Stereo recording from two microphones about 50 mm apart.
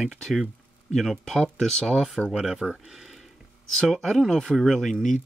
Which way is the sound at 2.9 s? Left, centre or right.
Centre.